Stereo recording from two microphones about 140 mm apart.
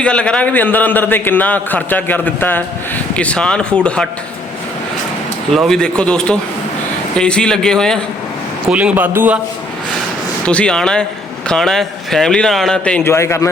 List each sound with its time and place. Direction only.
0.0 s a man's voice: 5° left (ahead or behind)
5.5 s a man's voice: 5° left (ahead or behind)
8.7 s speech: 10° right (ahead or behind)
10.4 s a man's voice: 10° left (ahead or behind)
13.1 s a man's voice: 20° left (ahead or behind)